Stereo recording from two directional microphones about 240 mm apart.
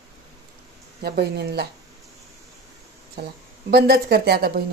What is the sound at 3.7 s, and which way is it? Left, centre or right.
Speech, right.